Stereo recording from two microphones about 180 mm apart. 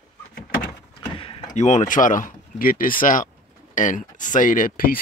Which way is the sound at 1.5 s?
45° left (ahead or behind).